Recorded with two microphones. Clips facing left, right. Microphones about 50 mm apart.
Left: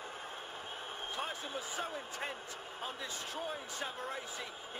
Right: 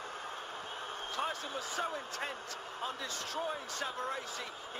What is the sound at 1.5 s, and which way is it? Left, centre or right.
Speech, centre.